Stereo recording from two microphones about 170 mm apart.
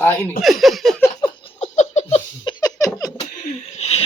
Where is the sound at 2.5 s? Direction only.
25° left (ahead or behind).